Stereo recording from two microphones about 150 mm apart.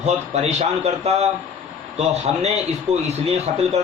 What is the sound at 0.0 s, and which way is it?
A man's voice, 45° right (ahead or behind).